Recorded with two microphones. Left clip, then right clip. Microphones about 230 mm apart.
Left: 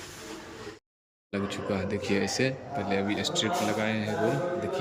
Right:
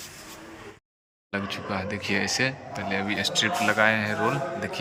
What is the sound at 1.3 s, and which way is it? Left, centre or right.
A man's voice, centre.